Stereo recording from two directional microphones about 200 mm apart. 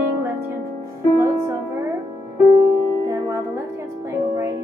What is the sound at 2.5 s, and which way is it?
Music, 15° right (ahead or behind).